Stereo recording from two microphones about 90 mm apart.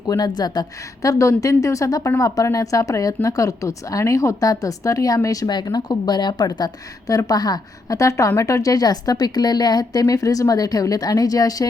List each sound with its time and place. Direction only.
0.1 s a woman's voice: 50° left (ahead or behind)